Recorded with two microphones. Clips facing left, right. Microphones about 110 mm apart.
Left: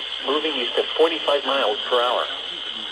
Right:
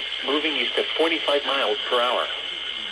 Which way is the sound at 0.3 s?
25° left (ahead or behind).